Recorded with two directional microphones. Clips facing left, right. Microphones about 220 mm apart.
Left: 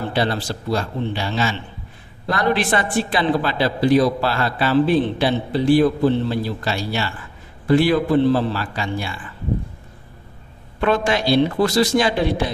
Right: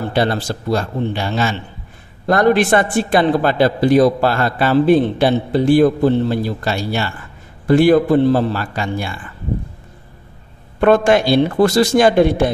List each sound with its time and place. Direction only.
0.1 s a man's voice: 50° right (ahead or behind)
10.8 s a man's voice: 50° right (ahead or behind)